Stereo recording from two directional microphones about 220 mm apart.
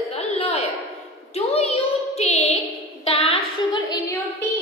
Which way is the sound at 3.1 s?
25° left (ahead or behind).